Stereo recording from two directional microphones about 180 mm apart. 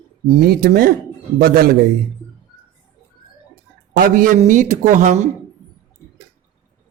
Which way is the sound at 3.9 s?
50° right (ahead or behind).